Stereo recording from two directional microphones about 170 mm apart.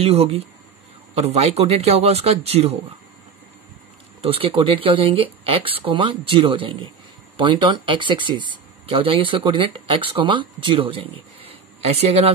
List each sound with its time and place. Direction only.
0.0 s speech: 35° right (ahead or behind)
4.2 s speech: 35° right (ahead or behind)